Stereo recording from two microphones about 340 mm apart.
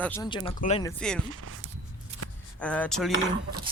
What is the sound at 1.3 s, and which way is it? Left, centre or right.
Speech, right.